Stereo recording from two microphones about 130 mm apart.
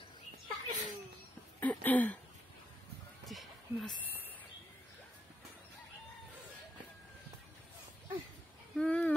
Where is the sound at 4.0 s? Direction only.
15° left (ahead or behind).